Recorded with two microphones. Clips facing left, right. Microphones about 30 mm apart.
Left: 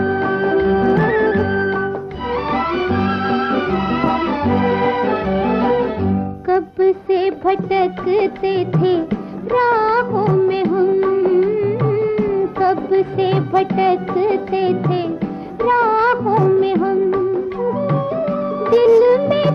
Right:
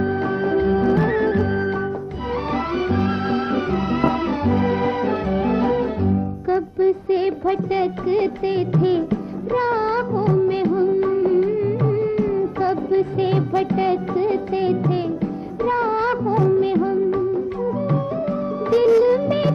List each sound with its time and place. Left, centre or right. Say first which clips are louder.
0.0 s music: left 4 dB; left
3.9 s music: left 1 dB; centre
16.5 s music of bollywood: left 3 dB; left
18.7 s music: left 4 dB; centre